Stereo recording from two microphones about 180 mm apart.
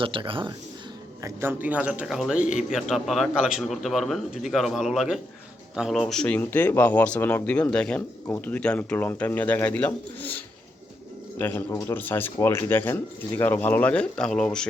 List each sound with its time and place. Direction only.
0.0 s speech: 30° right (ahead or behind)
1.2 s a man's voice: 10° right (ahead or behind); by 14.7 s 5° left (ahead or behind)